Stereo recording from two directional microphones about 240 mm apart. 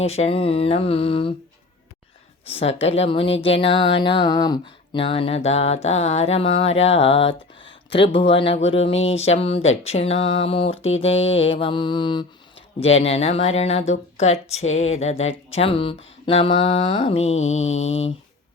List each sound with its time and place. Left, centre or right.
0.0 s speech: left
2.6 s speech: left